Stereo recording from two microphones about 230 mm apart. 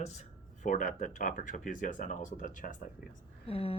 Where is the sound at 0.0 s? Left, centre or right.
Left.